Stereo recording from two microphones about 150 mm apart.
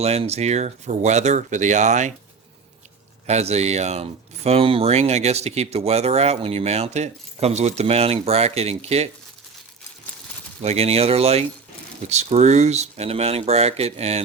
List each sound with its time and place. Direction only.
0.0 s speech: 45° right (ahead or behind)
3.2 s speech: 45° right (ahead or behind)
10.6 s speech: 45° right (ahead or behind)